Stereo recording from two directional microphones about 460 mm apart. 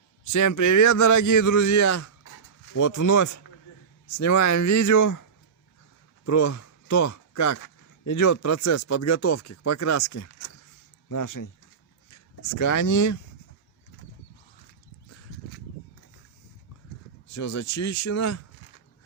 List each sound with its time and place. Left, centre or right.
0.3 s a man's voice: left
6.2 s a man's voice: left
17.3 s a man's voice: left